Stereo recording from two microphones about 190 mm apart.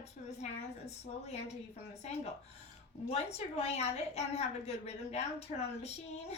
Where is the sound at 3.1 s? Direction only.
35° left (ahead or behind).